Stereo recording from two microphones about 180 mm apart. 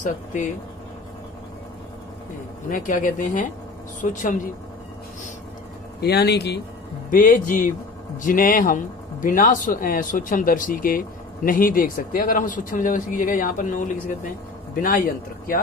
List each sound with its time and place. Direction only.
0.0 s a man's voice: 45° left (ahead or behind)
2.7 s a man's voice: 50° left (ahead or behind)
5.9 s speech: 65° left (ahead or behind)
7.1 s a man's voice: 50° left (ahead or behind)